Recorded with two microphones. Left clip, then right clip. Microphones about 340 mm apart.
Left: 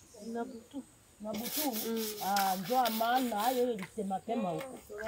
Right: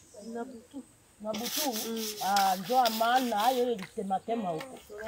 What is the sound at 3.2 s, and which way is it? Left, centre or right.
Speech, centre.